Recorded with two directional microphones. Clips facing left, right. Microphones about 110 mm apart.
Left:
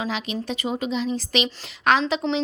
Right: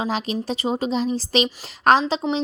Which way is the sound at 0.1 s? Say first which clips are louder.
Right 3 dB; 35° right (ahead or behind).